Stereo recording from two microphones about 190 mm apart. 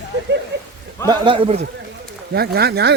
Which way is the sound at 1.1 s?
25° right (ahead or behind).